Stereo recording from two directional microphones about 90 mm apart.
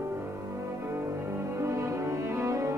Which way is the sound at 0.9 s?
30° right (ahead or behind).